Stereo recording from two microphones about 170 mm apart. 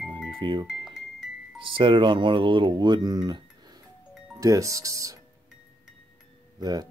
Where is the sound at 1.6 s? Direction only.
30° right (ahead or behind).